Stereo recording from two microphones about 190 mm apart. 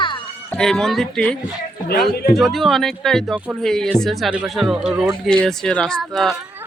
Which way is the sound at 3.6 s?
5° left (ahead or behind).